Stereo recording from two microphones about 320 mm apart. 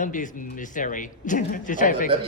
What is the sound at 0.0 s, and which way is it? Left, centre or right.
Speech, left.